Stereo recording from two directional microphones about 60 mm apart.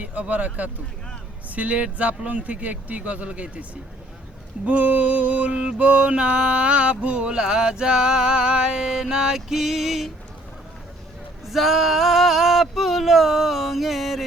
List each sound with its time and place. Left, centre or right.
0.0 s speech: right
4.6 s mantra: right; by 10.1 s centre
11.4 s male singing: centre